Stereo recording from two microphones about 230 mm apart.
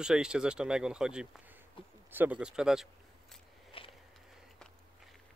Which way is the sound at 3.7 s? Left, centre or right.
Left.